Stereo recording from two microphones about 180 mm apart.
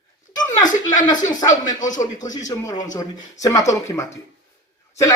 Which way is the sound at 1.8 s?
45° left (ahead or behind).